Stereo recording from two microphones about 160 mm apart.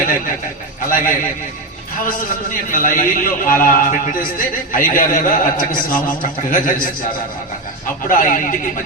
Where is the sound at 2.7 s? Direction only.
55° left (ahead or behind).